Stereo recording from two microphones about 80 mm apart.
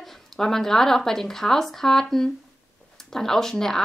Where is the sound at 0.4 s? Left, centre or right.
Centre.